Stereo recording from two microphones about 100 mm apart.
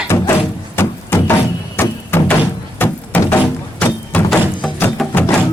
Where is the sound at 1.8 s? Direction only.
20° left (ahead or behind).